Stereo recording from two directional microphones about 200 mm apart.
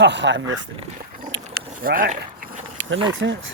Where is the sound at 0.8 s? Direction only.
40° right (ahead or behind).